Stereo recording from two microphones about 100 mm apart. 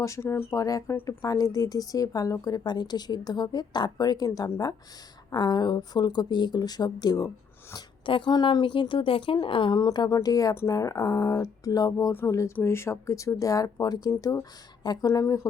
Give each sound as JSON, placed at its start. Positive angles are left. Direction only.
{"t": 0.0, "sound": "speech", "side_deg": 30}
{"t": 0.5, "sound": "a woman's voice", "side_deg": 35}
{"t": 8.0, "sound": "speech", "side_deg": 55}
{"t": 10.1, "sound": "a woman's voice", "side_deg": 35}